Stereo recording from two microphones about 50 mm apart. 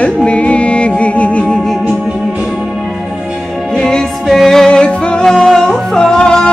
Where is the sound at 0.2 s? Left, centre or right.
Left.